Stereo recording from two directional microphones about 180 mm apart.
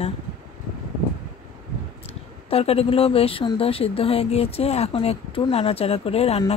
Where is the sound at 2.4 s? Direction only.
35° left (ahead or behind).